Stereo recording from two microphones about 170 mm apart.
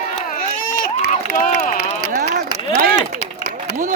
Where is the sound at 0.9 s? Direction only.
50° left (ahead or behind).